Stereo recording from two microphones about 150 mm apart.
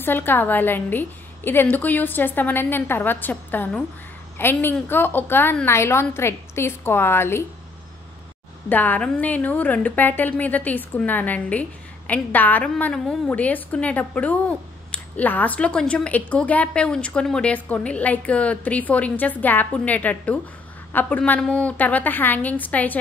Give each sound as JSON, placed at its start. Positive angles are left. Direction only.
{"t": 0.0, "sound": "a woman's voice", "side_deg": 15}
{"t": 8.6, "sound": "a woman's voice", "side_deg": 10}